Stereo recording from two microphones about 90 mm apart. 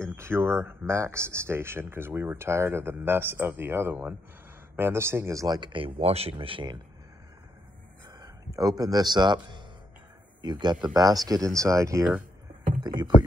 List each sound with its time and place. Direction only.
0.0 s speech: 30° right (ahead or behind)
5.6 s speech: 70° right (ahead or behind)
8.2 s speech: 40° right (ahead or behind)
12.8 s a sound: 50° right (ahead or behind)